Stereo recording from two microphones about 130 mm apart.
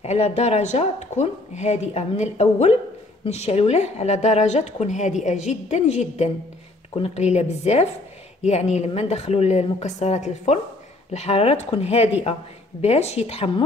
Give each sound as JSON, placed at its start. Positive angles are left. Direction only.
{"t": 0.0, "sound": "a woman's voice", "side_deg": 55}